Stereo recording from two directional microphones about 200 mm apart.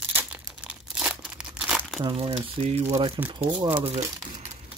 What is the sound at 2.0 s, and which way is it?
Speech, 30° right (ahead or behind).